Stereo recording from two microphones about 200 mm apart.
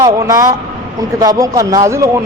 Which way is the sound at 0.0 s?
15° right (ahead or behind).